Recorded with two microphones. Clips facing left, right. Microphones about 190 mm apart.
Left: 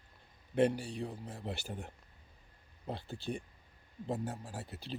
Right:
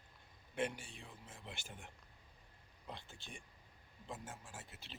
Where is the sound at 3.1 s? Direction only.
35° left (ahead or behind).